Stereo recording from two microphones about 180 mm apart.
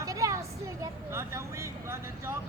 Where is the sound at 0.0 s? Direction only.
20° right (ahead or behind).